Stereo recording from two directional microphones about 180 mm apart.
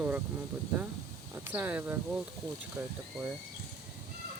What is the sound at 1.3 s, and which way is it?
Speech, 10° right (ahead or behind).